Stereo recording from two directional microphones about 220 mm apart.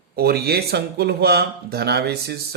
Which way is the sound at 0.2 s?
45° right (ahead or behind).